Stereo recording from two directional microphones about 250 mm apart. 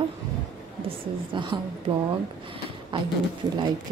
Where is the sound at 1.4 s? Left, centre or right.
Centre.